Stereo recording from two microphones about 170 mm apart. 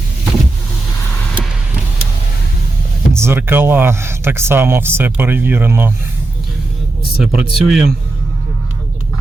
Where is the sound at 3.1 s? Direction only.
15° right (ahead or behind).